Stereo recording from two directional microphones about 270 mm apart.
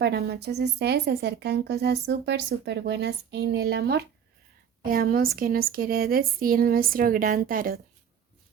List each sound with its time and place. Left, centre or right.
0.0 s speech: right